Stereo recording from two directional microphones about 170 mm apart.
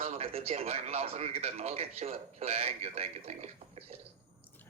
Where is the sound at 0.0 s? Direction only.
35° right (ahead or behind).